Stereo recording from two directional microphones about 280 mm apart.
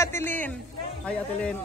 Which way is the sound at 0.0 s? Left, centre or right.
Centre.